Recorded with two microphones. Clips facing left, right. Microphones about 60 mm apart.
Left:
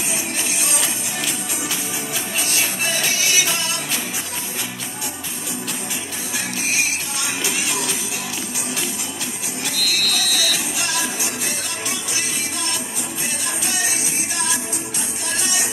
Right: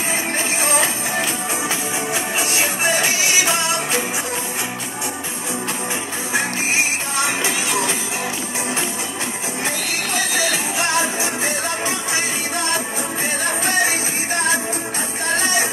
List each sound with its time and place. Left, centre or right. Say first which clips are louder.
0.1 s music: right 4 dB; right
6.3 s music: right 4 dB; right
9.7 s music: left 1 dB; right